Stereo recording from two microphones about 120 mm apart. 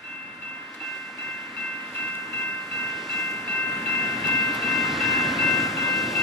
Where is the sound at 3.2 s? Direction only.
20° left (ahead or behind).